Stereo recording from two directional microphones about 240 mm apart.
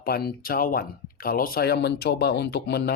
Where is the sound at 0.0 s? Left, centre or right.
Left.